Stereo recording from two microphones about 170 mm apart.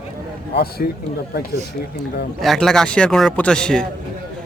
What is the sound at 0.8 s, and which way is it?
Speech, 55° left (ahead or behind).